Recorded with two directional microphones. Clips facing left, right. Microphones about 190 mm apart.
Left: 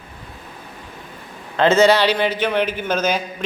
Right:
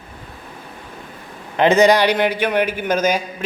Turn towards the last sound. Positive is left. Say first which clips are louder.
# right 2 dB
turn(degrees=-10)  # may be behind; listen again after turning